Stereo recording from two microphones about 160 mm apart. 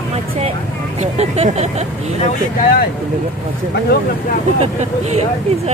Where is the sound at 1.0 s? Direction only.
40° right (ahead or behind).